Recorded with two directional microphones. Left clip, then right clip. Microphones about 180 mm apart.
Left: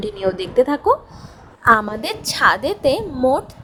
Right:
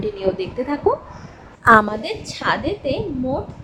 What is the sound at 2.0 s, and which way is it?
A woman's voice, 70° left (ahead or behind).